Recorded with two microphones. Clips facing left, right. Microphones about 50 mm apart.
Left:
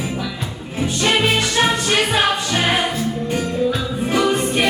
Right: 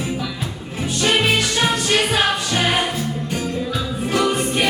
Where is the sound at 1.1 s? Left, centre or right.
Centre.